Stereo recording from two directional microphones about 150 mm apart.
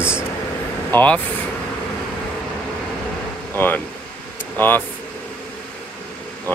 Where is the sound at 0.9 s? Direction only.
10° left (ahead or behind).